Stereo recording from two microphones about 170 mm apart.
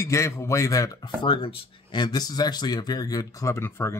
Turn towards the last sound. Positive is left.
turn(degrees=15)  # may be behind; listen again after turning